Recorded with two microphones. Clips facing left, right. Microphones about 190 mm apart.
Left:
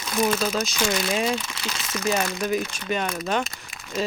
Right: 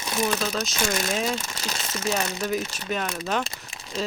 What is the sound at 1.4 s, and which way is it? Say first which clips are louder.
Speech: even; 40° right (ahead or behind).